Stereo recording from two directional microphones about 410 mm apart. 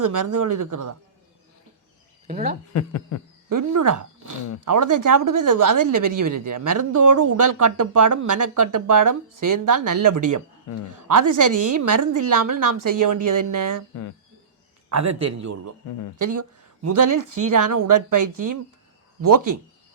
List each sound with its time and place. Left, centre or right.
0.0 s speech: right
2.2 s speech: centre
2.7 s a sound: left
3.5 s speech: right
10.7 s a sound: left
11.1 s speech: right
14.8 s a man's voice: right